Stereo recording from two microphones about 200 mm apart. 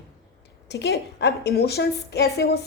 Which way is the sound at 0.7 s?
60° left (ahead or behind).